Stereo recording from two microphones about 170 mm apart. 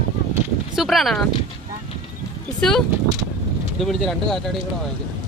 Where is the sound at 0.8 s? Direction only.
Centre (ahead or behind).